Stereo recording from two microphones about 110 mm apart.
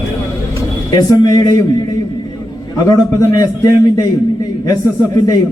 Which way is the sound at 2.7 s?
35° left (ahead or behind).